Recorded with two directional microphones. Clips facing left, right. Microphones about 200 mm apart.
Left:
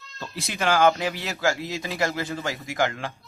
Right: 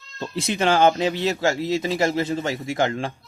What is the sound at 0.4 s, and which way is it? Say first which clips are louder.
Speech: right 2 dB; 25° right (ahead or behind).